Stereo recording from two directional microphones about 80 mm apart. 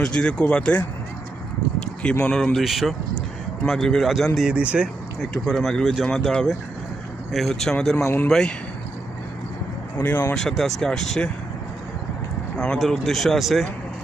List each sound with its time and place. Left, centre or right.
0.0 s speech: centre
2.2 s speech: centre
4.4 s speech: centre
5.2 s speech: centre
10.0 s speech: left
10.3 s speech: centre
12.5 s speech: centre